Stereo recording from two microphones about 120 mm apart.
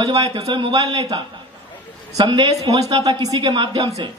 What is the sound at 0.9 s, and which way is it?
A man's voice, 30° right (ahead or behind).